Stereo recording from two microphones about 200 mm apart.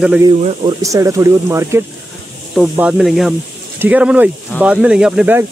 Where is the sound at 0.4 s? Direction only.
30° right (ahead or behind).